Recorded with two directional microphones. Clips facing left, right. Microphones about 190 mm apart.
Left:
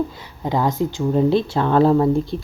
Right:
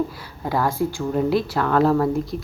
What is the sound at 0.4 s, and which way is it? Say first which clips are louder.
Speech: left 2 dB; 20° left (ahead or behind).